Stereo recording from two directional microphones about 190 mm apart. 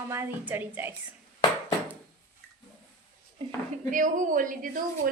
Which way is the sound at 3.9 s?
45° right (ahead or behind).